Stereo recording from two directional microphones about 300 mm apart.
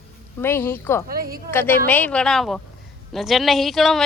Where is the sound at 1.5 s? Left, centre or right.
Centre.